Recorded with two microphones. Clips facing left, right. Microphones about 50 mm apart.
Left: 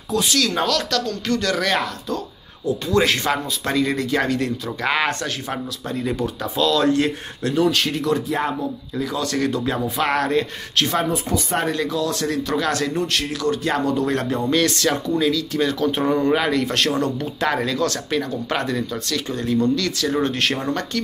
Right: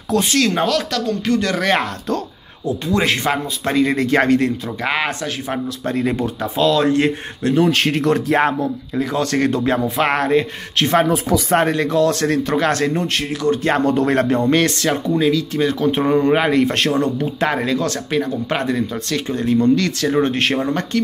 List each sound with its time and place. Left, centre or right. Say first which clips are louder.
0.2 s speech: right 2 dB; right
0.6 s speech: right 2 dB; centre
2.9 s speech: right 1 dB; right
4.8 s speech: even; centre
5.9 s speech: right 5 dB; right
6.2 s speech: right 1 dB; right
7.9 s speech: right 5 dB; right
8.9 s speech: right 4 dB; right
9.8 s speech: right 3 dB; right
11.8 s speech: right 6 dB; right
12.4 s speech: right 4 dB; right
13.7 s speech: right 5 dB; right
14.5 s speech: right 3 dB; right
14.9 s speech: right 3 dB; right